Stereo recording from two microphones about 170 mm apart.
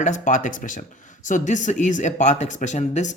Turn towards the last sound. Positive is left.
turn(degrees=45)  # may be behind; listen again after turning